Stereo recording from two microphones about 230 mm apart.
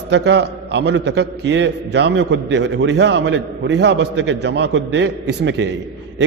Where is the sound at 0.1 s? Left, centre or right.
Right.